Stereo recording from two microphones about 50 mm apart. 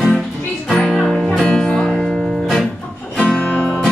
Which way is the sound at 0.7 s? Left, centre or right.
Centre.